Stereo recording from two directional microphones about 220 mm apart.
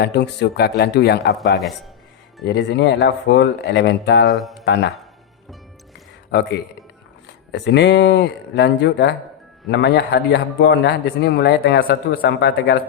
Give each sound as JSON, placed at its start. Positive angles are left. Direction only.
{"t": 0.0, "sound": "a man's voice", "side_deg": 50}
{"t": 1.5, "sound": "a man's voice", "side_deg": 0}
{"t": 2.4, "sound": "a man's voice", "side_deg": 50}
{"t": 4.3, "sound": "a man's voice", "side_deg": 0}
{"t": 4.6, "sound": "a man's voice", "side_deg": 50}
{"t": 7.5, "sound": "a man's voice", "side_deg": 50}